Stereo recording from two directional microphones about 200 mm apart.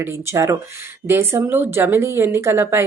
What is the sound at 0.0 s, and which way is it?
Speech, 15° right (ahead or behind).